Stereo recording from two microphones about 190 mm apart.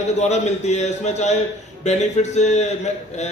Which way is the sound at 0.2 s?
35° left (ahead or behind).